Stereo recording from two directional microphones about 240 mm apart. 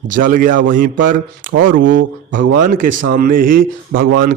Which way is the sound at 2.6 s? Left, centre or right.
Right.